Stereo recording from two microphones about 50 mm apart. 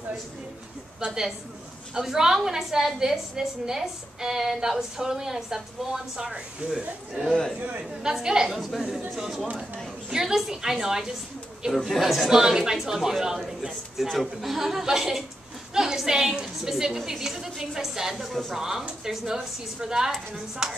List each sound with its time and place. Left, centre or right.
1.0 s a woman's voice: centre